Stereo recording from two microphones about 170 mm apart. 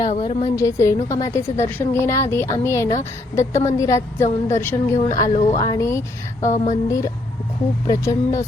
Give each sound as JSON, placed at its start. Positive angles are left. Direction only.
{"t": 0.1, "sound": "a woman's voice", "side_deg": 35}
{"t": 0.5, "sound": "a woman's voice", "side_deg": 15}
{"t": 6.4, "sound": "a sound", "side_deg": 45}
{"t": 6.8, "sound": "a woman's voice", "side_deg": 20}